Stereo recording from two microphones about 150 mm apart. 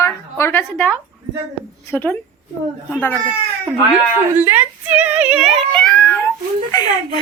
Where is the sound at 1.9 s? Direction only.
15° left (ahead or behind).